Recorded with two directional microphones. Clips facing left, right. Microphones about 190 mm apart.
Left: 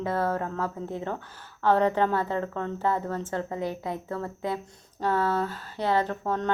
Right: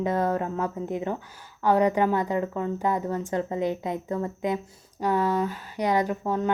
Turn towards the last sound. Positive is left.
turn(degrees=-10)  # may be behind; listen again after turning